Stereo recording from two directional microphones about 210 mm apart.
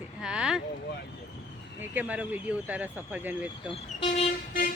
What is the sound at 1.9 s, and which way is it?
Speech, 5° right (ahead or behind).